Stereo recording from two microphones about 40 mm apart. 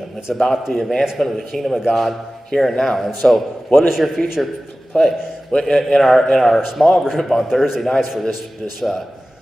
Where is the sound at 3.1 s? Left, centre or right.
Centre.